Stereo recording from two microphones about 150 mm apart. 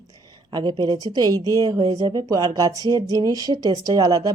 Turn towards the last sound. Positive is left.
turn(degrees=-25)  # may be behind; listen again after turning